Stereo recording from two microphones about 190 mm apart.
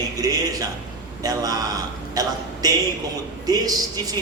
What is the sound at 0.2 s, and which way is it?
A man's voice, 20° right (ahead or behind).